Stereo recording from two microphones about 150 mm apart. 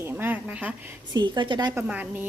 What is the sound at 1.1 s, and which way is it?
Speech, 30° right (ahead or behind).